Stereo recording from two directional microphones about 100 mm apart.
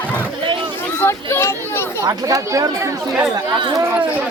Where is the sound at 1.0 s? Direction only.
25° left (ahead or behind).